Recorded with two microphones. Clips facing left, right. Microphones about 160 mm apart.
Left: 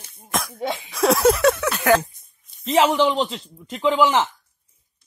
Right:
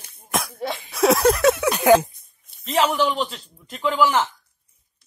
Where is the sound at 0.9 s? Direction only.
Centre (ahead or behind).